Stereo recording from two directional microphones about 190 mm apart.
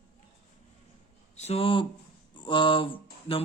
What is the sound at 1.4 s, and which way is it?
Speech, 35° left (ahead or behind).